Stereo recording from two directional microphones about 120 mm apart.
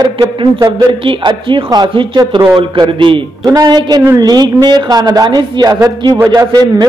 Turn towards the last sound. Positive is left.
turn(degrees=-35)  # may be behind; listen again after turning